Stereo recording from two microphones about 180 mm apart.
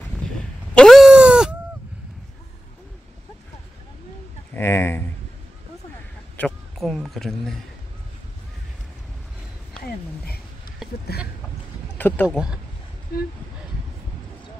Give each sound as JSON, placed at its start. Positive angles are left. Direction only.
{"t": 0.0, "sound": "sheep", "side_deg": 5}
{"t": 4.6, "sound": "speech", "side_deg": 15}
{"t": 6.3, "sound": "speech", "side_deg": 5}
{"t": 11.1, "sound": "speech", "side_deg": 60}
{"t": 12.0, "sound": "speech", "side_deg": 10}
{"t": 13.1, "sound": "speech", "side_deg": 60}